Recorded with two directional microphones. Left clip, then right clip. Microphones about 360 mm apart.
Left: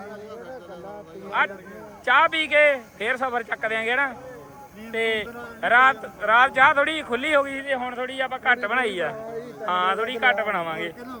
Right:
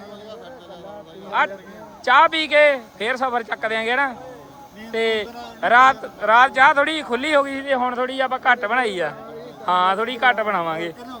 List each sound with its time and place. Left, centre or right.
2.0 s a man's voice: centre